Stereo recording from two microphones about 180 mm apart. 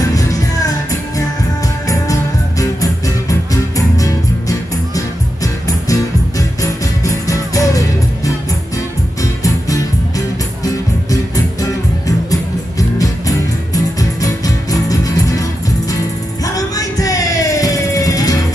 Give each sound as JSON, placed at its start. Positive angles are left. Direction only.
{"t": 0.0, "sound": "music", "side_deg": 20}
{"t": 2.6, "sound": "music", "side_deg": 20}
{"t": 16.4, "sound": "music", "side_deg": 20}